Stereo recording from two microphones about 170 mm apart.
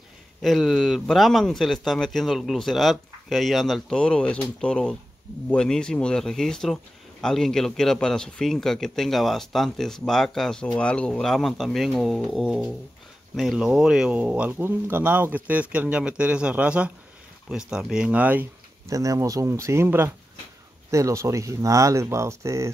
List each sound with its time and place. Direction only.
0.4 s speech: centre (ahead or behind); by 22.7 s 15° right (ahead or behind)